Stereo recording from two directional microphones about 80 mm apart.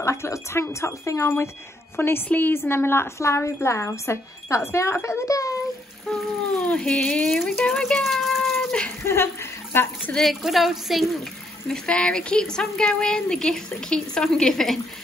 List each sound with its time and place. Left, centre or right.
0.0 s a child's voice: left
6.6 s speech: centre
9.0 s speech: left
10.1 s a woman's voice: centre
11.7 s a woman's voice: centre